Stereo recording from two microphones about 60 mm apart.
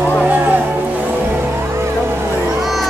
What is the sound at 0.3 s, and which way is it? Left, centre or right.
Music, right.